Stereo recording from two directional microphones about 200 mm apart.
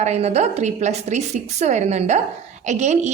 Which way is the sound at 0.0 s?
35° right (ahead or behind).